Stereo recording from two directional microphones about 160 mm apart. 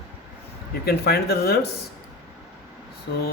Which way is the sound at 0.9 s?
80° left.